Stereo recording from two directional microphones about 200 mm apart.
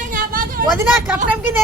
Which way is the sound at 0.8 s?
10° right (ahead or behind).